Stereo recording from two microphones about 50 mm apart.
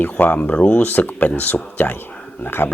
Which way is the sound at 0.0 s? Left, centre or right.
Left.